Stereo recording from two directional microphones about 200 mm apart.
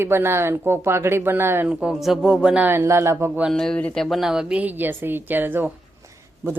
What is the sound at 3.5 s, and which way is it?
Speech, 5° left (ahead or behind).